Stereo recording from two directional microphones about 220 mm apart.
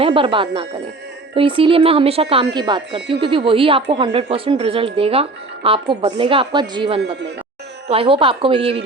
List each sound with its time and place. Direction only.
0.0 s speech: 25° right (ahead or behind)